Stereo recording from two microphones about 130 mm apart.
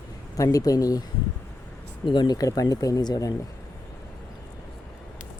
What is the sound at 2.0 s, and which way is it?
Speech, 35° left (ahead or behind).